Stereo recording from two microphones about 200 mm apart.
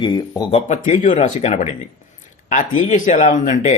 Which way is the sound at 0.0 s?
20° left (ahead or behind).